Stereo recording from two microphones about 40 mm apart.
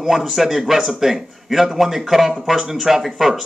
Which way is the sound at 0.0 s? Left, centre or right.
Centre.